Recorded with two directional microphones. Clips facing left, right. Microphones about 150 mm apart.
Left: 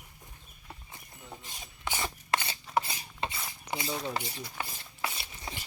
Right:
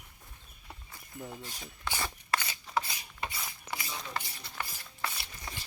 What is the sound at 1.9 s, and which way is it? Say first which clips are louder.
Rub: left 2 dB; 20° left (ahead or behind).